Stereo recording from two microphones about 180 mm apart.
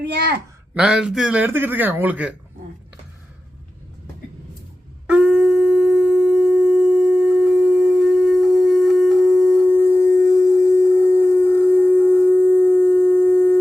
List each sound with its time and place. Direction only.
0.0 s speech: 65° right (ahead or behind)
0.7 s speech: 5° right (ahead or behind)
5.0 s shofar: 5° right (ahead or behind); by 13.6 s 10° left (ahead or behind)